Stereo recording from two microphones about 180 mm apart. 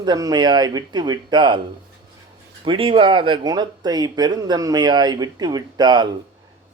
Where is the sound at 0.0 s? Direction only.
20° right (ahead or behind).